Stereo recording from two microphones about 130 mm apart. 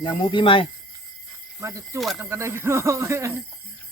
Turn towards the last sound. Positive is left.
turn(degrees=-20)  # may be behind; listen again after turning